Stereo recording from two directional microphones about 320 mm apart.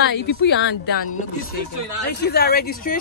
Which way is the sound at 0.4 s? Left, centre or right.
Left.